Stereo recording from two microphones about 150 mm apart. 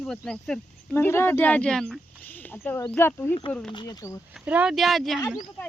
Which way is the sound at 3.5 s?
5° left (ahead or behind).